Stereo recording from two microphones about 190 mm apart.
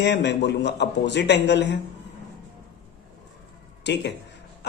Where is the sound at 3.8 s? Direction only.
65° left (ahead or behind).